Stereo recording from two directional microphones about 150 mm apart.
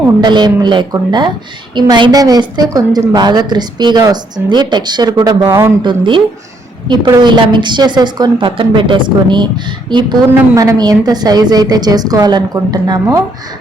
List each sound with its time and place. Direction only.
0.2 s a woman's voice: 30° right (ahead or behind)
5.8 s a woman's voice: 35° right (ahead or behind)